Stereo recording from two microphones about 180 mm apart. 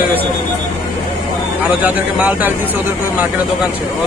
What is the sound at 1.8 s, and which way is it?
Speech, 10° right (ahead or behind).